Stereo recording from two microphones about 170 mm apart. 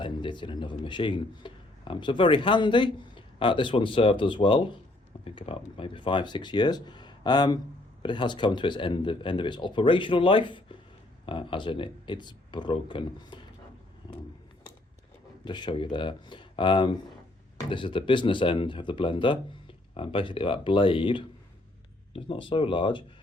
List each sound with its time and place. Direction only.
0.0 s a man's voice: 30° left (ahead or behind)
15.4 s a man's voice: 25° left (ahead or behind)